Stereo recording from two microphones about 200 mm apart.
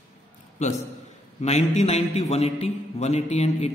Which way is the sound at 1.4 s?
35° left (ahead or behind).